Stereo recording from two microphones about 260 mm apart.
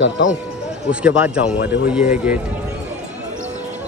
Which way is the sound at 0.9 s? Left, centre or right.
Centre.